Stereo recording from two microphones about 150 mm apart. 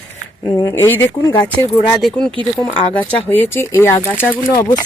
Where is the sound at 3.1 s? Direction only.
10° left (ahead or behind).